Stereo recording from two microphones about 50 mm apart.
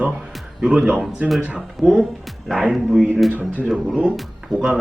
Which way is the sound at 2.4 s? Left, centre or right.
Centre.